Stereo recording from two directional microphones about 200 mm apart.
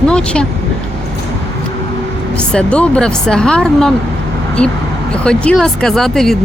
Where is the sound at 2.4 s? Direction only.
5° left (ahead or behind).